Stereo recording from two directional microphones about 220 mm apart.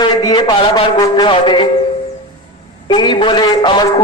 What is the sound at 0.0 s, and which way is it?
A man's voice, 20° left (ahead or behind).